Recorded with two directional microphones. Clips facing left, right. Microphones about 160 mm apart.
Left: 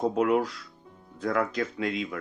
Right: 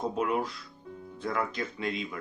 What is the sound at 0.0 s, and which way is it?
Speech, 85° left.